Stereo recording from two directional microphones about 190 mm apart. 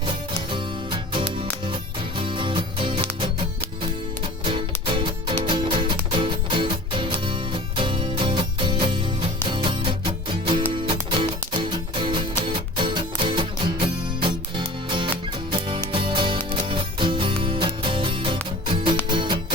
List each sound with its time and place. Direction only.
0.0 s music: 25° right (ahead or behind)
4.4 s music: 30° right (ahead or behind)